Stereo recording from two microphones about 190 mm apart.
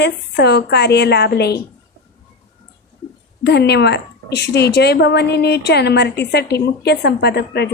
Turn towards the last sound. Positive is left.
turn(degrees=60)  # may be behind; listen again after turning